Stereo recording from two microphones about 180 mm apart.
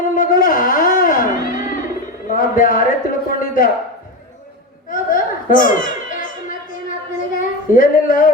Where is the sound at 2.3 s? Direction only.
50° left (ahead or behind).